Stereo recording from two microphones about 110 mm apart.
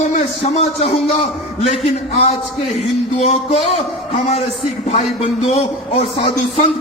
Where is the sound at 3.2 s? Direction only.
85° left.